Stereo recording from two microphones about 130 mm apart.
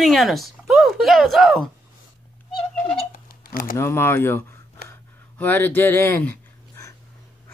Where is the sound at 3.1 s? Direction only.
90° left.